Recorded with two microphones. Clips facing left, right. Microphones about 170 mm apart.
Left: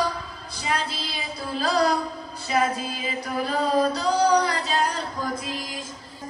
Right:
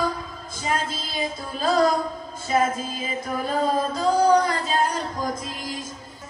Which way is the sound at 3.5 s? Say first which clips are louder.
Left 1 dB; 50° right (ahead or behind).